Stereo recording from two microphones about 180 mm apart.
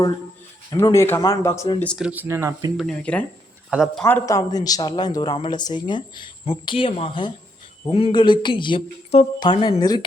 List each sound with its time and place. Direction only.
0.7 s speech: 20° left (ahead or behind)
2.0 s speech: 5° right (ahead or behind)
2.7 s speech: 5° left (ahead or behind)
3.7 s speech: 5° right (ahead or behind)
4.0 s speech: 15° left (ahead or behind)